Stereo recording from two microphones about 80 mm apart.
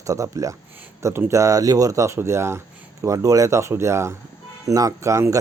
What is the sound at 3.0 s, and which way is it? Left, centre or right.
Speech, right.